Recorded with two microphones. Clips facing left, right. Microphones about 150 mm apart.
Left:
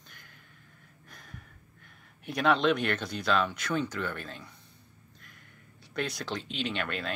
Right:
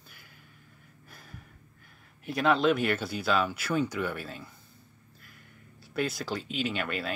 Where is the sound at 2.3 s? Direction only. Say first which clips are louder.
Right 1 dB; centre (ahead or behind).